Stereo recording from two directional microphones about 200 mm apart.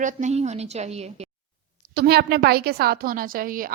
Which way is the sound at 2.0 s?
55° right (ahead or behind).